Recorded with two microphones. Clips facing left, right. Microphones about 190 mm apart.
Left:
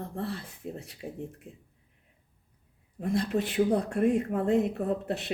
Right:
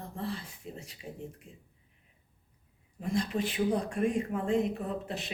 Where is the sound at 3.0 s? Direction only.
60° left (ahead or behind).